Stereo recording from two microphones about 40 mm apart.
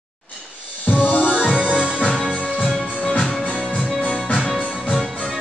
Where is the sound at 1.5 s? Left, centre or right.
Right.